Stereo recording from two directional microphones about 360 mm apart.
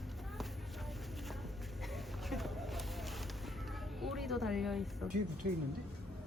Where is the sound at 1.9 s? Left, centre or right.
Centre.